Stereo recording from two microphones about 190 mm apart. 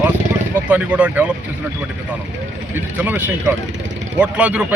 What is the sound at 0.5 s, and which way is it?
Speech, 5° right (ahead or behind).